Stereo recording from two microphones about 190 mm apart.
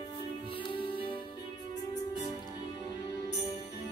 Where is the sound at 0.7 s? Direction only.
30° left (ahead or behind).